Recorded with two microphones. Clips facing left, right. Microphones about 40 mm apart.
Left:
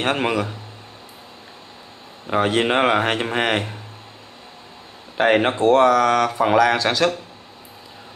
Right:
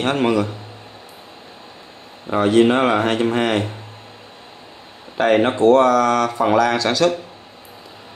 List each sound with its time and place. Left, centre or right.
0.0 s speech: left
2.3 s speech: left
5.1 s speech: left